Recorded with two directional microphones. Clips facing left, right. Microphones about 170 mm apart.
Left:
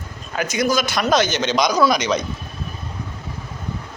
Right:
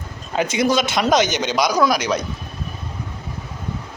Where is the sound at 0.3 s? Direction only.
25° right (ahead or behind); by 2.2 s 5° right (ahead or behind).